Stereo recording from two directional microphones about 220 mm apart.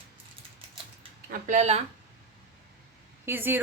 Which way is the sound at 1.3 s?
35° right (ahead or behind).